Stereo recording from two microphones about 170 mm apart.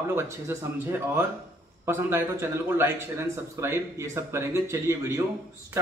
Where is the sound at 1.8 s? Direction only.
15° right (ahead or behind).